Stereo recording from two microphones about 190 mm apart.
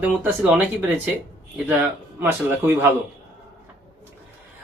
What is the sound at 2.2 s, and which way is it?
Speech, 10° right (ahead or behind).